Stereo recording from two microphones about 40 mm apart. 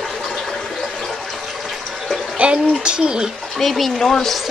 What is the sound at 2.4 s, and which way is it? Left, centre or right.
Speech, right.